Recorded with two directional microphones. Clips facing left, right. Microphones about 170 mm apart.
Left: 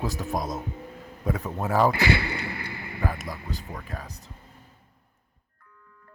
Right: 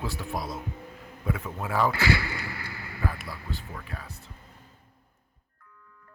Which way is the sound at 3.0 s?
45° left (ahead or behind).